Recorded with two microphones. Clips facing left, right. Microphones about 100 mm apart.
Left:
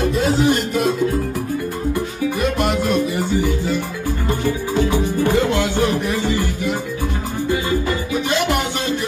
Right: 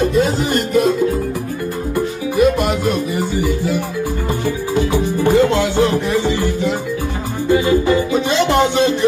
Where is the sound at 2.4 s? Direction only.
Centre (ahead or behind).